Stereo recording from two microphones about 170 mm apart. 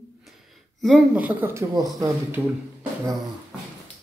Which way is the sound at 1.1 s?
10° right (ahead or behind).